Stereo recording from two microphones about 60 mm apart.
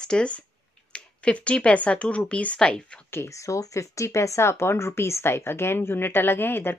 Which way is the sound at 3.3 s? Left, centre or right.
Left.